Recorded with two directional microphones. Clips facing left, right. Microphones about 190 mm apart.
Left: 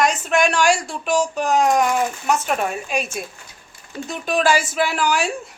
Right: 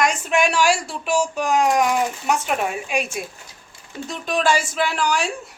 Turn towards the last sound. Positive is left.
turn(degrees=5)  # may be behind; listen again after turning